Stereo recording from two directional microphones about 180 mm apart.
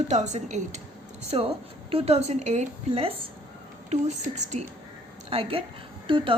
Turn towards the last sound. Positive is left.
turn(degrees=-25)  # may be behind; listen again after turning